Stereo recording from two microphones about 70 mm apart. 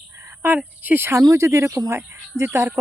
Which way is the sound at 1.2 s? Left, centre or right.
Right.